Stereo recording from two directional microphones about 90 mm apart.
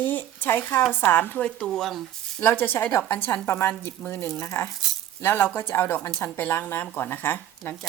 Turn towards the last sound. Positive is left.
turn(degrees=20)  # may be behind; listen again after turning